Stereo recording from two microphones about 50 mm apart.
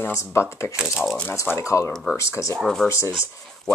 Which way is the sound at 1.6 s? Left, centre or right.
Left.